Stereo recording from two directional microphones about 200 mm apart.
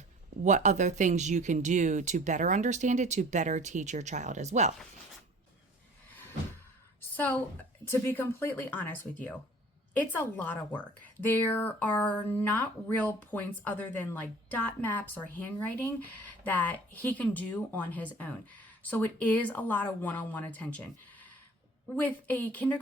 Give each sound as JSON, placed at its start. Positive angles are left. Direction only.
{"t": 0.4, "sound": "speech", "side_deg": -35}
{"t": 7.2, "sound": "speech", "side_deg": 5}